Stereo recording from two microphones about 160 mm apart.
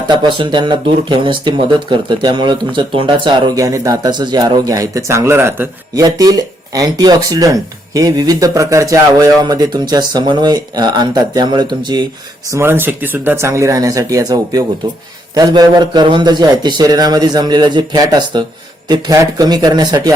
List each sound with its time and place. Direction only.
0.1 s speech: 30° right (ahead or behind)
12.5 s speech: 15° right (ahead or behind)